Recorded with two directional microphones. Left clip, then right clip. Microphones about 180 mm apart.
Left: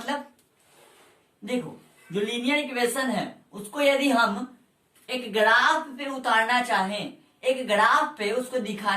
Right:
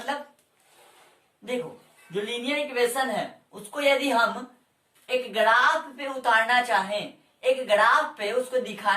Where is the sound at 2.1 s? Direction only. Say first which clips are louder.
Left 3 dB; 15° right (ahead or behind).